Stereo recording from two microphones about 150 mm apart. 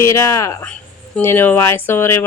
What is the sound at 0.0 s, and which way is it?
Speech, 20° left (ahead or behind).